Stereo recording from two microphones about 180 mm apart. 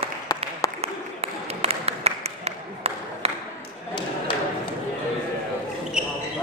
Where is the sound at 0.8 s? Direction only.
35° right (ahead or behind).